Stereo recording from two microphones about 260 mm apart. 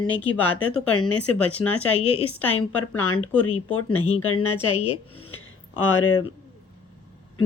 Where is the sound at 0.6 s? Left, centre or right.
Left.